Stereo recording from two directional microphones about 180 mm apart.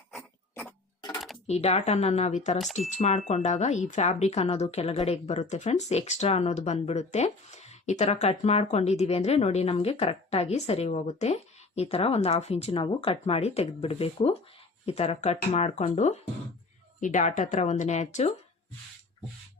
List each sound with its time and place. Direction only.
1.5 s speech: 35° left (ahead or behind)